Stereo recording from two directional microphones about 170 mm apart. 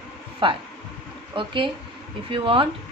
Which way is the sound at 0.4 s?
30° right (ahead or behind).